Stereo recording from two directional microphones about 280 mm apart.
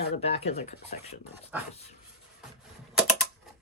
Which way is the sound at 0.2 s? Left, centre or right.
Left.